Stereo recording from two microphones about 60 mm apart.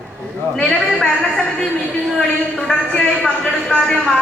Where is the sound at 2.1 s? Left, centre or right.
Centre.